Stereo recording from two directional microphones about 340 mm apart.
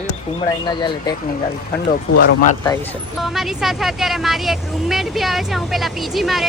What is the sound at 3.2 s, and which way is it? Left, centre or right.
A woman's voice, centre.